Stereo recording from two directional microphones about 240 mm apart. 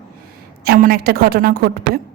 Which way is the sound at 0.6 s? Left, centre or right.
Right.